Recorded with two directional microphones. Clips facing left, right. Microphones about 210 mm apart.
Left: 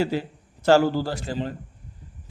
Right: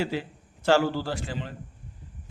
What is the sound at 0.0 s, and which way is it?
A man's voice, 40° left (ahead or behind).